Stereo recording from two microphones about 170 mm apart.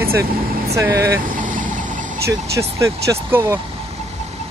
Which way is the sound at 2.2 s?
20° right (ahead or behind).